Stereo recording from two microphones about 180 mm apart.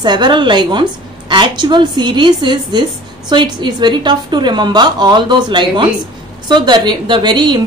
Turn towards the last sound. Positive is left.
turn(degrees=-25)  # may be behind; listen again after turning